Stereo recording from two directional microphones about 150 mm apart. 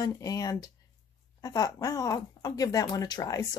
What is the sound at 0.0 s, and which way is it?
Speech, 25° left (ahead or behind).